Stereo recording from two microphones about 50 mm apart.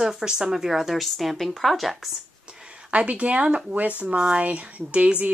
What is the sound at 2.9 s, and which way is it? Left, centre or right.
Speech, right.